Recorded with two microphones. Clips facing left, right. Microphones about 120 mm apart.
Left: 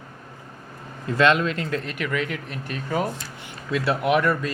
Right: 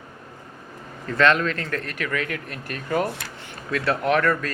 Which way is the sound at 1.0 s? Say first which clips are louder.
Even; 15° left (ahead or behind).